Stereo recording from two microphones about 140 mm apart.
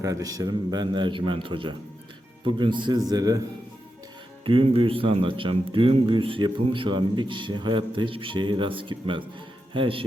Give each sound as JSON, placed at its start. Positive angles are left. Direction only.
{"t": 0.0, "sound": "a man's voice", "side_deg": -25}
{"t": 4.4, "sound": "a man's voice", "side_deg": -40}